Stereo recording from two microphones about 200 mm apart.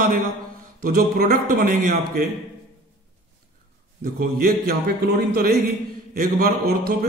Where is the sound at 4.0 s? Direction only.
50° right (ahead or behind).